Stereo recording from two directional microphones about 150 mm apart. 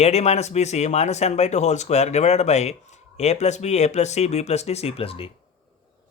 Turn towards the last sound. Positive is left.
turn(degrees=40)  # may be behind; listen again after turning